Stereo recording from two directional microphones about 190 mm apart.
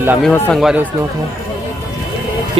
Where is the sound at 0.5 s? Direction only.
5° right (ahead or behind).